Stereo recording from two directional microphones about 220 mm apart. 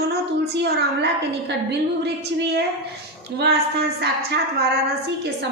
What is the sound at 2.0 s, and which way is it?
A woman's voice, 50° right (ahead or behind).